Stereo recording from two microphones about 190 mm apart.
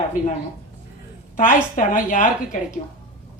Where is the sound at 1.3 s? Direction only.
45° left (ahead or behind).